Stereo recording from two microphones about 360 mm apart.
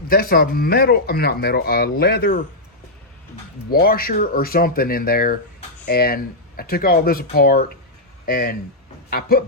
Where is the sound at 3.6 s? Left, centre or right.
Left.